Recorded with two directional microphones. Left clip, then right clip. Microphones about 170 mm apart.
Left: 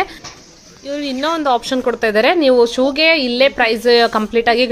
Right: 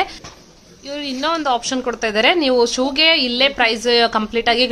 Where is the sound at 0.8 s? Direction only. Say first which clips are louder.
Left 2 dB; 20° left (ahead or behind).